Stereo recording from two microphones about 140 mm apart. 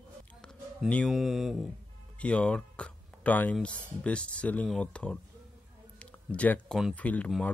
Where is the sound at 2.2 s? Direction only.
10° left (ahead or behind).